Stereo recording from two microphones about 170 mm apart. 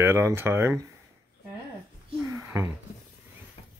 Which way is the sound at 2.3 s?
15° right (ahead or behind).